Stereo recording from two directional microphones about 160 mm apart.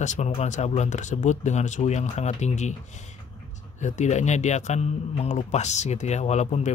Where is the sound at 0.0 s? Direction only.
50° left (ahead or behind).